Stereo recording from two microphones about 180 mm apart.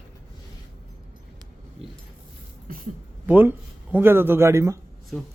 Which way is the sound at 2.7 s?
50° right (ahead or behind).